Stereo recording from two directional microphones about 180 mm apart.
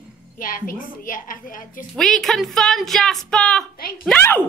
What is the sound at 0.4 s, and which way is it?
A woman's voice, 50° left (ahead or behind).